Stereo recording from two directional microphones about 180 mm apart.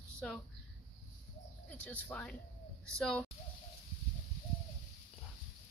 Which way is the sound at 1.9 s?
10° left (ahead or behind).